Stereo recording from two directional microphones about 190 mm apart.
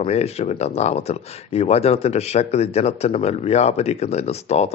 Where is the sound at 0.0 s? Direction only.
35° left (ahead or behind).